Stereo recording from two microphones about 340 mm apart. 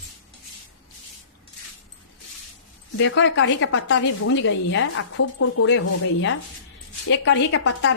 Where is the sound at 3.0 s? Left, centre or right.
Left.